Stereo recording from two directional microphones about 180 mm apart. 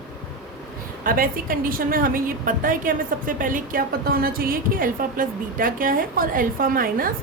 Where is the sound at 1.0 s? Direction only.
50° right (ahead or behind).